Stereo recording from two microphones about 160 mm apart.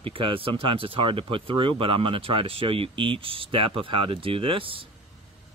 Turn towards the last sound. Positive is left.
turn(degrees=-35)  # may be behind; listen again after turning